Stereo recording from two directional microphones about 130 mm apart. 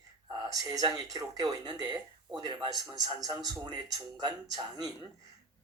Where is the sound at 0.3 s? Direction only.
35° right (ahead or behind).